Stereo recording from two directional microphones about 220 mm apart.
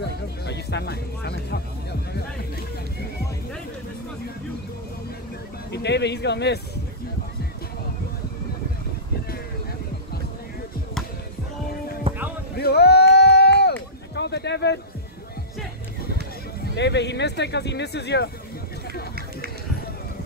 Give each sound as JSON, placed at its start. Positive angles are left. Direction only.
{"t": 0.5, "sound": "speech", "side_deg": 50}
{"t": 5.7, "sound": "speech", "side_deg": 50}
{"t": 12.1, "sound": "music", "side_deg": -25}
{"t": 12.5, "sound": "a sound", "side_deg": 45}
{"t": 14.1, "sound": "speech", "side_deg": 50}
{"t": 16.7, "sound": "speech", "side_deg": 50}